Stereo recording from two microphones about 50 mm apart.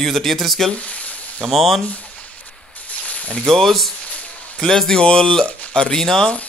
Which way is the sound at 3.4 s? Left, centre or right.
Centre.